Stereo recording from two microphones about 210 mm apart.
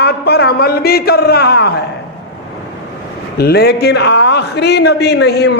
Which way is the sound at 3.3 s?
50° left (ahead or behind).